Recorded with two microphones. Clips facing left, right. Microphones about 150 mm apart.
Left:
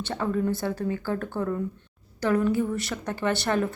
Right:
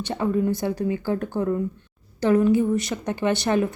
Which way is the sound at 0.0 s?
15° right (ahead or behind).